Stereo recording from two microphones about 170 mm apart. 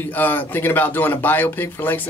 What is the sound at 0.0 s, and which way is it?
Speech, 10° left (ahead or behind).